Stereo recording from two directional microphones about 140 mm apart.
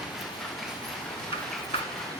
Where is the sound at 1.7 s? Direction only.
45° left (ahead or behind).